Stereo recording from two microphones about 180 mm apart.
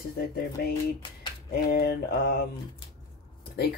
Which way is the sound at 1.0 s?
25° left (ahead or behind).